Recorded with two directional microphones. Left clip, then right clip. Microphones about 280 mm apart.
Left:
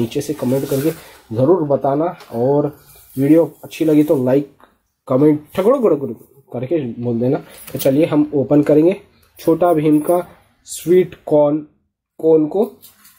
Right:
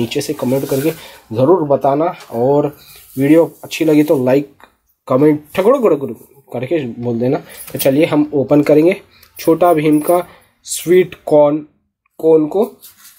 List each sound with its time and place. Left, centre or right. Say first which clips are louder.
0.0 s speech: right 2 dB; centre
0.4 s speech: right 1 dB; centre
2.0 s speech: right 3 dB; centre
2.2 s speech: right 2 dB; left
3.2 s speech: right 2 dB; centre
12.2 s speech: right 2 dB; left